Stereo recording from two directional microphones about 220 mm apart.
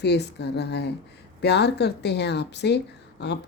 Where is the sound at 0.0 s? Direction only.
50° left (ahead or behind).